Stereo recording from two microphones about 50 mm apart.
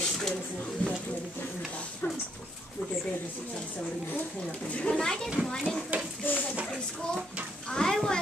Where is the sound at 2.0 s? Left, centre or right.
Left.